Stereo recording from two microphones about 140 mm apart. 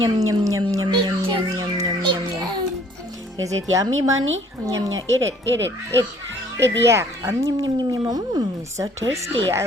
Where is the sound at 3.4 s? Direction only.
25° right (ahead or behind).